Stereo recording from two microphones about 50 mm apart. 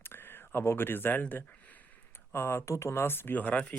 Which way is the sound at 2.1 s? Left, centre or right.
Left.